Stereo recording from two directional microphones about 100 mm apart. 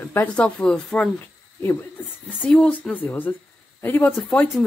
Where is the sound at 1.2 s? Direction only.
20° left (ahead or behind).